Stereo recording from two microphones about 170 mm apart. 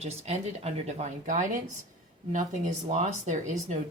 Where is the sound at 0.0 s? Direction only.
40° right (ahead or behind).